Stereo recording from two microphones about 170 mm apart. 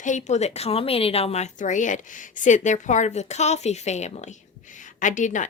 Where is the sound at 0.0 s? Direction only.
45° left (ahead or behind).